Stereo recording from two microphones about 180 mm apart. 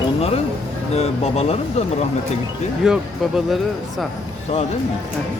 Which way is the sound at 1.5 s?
35° left (ahead or behind).